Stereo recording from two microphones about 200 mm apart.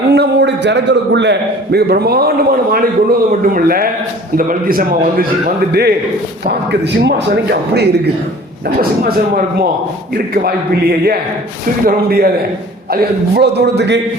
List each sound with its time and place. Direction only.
0.1 s a man's voice: 55° right (ahead or behind)
6.4 s a man's voice: 55° right (ahead or behind)